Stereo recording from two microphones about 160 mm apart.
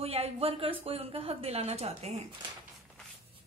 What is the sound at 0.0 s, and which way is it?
Speech, 40° right (ahead or behind).